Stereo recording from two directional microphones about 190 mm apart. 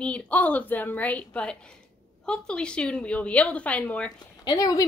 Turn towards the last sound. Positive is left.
turn(degrees=20)  # may be behind; listen again after turning